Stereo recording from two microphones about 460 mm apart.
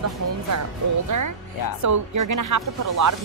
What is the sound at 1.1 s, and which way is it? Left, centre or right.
Speech, right.